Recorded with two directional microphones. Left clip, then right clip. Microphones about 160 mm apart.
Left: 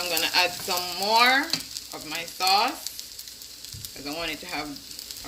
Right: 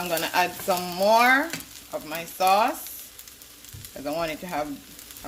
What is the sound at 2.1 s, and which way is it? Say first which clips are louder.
Speech: right 2 dB; 65° right (ahead or behind).